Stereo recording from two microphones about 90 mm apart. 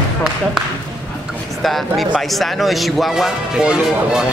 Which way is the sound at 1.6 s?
Centre (ahead or behind).